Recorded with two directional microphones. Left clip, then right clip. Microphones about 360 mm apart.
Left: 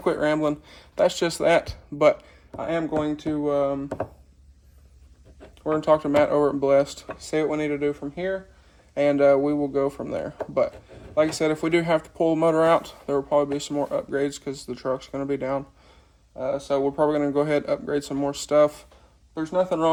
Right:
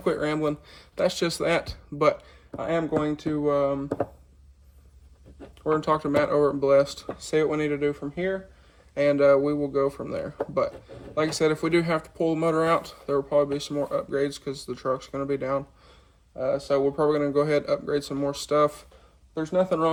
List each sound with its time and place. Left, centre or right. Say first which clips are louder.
0.0 s speech: left 3 dB; centre
5.7 s speech: left 4 dB; centre